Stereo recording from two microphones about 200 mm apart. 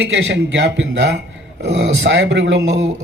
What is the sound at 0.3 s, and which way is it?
A man's voice, 65° right (ahead or behind).